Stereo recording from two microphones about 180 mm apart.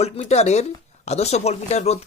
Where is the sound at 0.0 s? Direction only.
40° left (ahead or behind).